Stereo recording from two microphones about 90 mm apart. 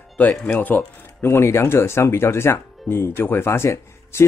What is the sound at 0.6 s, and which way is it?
Speech, 20° left (ahead or behind).